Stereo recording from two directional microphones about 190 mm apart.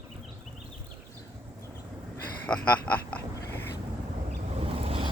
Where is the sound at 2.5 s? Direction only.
5° left (ahead or behind).